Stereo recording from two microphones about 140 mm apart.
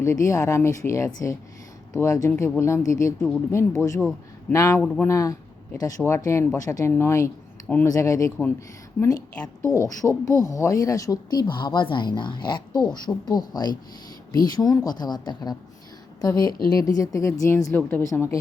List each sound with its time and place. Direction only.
0.0 s speech: 20° left (ahead or behind)
4.8 s speech: 5° left (ahead or behind)
5.0 s speech: 25° left (ahead or behind)
9.6 s speech: 20° left (ahead or behind)